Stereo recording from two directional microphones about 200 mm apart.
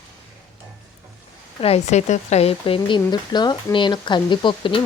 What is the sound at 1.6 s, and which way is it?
Speech, 30° left (ahead or behind).